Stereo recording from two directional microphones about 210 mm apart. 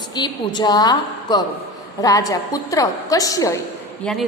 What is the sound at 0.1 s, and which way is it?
A woman's voice, 20° left (ahead or behind).